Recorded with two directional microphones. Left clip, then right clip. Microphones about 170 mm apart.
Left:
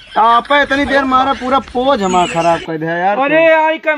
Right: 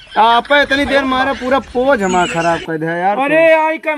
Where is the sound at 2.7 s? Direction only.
20° left (ahead or behind).